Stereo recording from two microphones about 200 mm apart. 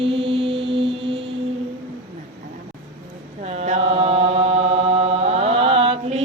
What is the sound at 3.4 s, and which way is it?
Chant, 30° right (ahead or behind).